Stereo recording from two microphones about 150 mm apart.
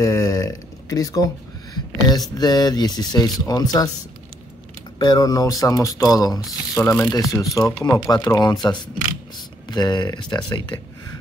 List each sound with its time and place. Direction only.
0.0 s a sound: 25° left (ahead or behind)
2.3 s speech: 25° left (ahead or behind)
4.9 s speech: 25° left (ahead or behind)